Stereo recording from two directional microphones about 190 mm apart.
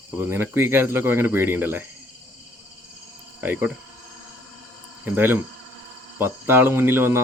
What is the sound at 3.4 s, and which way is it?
Speech, 10° right (ahead or behind).